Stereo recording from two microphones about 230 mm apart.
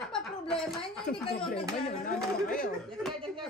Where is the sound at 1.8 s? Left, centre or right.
Left.